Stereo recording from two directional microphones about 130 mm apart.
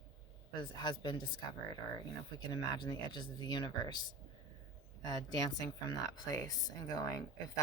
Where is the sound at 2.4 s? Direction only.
35° left (ahead or behind).